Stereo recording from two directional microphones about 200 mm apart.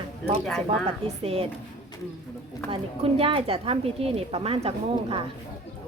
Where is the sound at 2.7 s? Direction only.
30° right (ahead or behind).